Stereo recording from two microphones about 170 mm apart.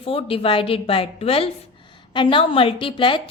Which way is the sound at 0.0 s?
35° left (ahead or behind).